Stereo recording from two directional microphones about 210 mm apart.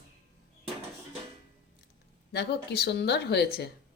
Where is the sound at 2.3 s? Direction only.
50° left (ahead or behind).